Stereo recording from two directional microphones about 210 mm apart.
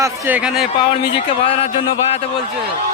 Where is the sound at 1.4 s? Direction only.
30° left (ahead or behind).